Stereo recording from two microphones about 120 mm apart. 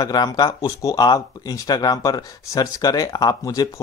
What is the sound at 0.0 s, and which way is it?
Speech, 35° left (ahead or behind).